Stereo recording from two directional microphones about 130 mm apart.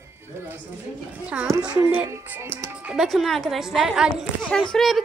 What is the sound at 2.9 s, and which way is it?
A woman's voice, centre (ahead or behind).